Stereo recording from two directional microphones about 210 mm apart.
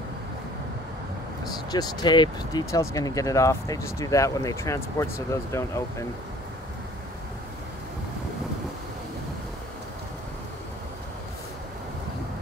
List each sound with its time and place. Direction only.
1.7 s speech: 20° left (ahead or behind)